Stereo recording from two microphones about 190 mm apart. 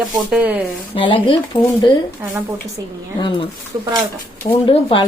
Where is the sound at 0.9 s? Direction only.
25° left (ahead or behind).